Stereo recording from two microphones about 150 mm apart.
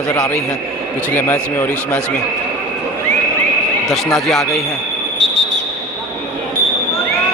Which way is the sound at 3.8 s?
Centre (ahead or behind).